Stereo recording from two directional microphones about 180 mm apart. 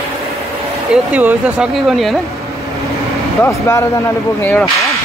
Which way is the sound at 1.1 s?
10° right (ahead or behind).